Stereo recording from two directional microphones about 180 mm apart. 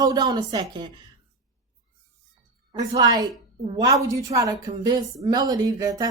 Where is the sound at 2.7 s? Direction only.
20° right (ahead or behind).